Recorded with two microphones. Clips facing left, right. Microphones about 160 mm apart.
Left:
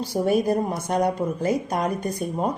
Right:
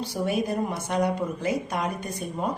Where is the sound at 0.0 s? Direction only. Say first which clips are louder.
Left 5 dB; 40° left (ahead or behind).